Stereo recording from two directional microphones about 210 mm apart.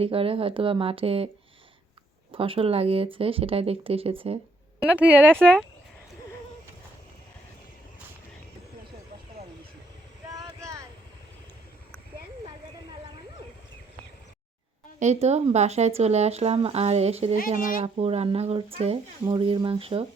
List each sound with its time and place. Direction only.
0.0 s speech: 25° right (ahead or behind)
2.3 s speech: 25° right (ahead or behind)
4.8 s speech: 5° right (ahead or behind)
5.4 s speech: 5° left (ahead or behind)
10.3 s a sound: 15° right (ahead or behind)
14.9 s speech: 30° right (ahead or behind)